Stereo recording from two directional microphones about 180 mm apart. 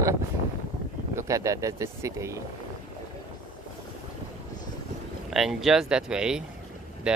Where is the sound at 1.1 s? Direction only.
15° right (ahead or behind).